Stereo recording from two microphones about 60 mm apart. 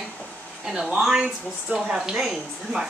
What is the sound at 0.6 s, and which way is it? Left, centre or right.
Speech, centre.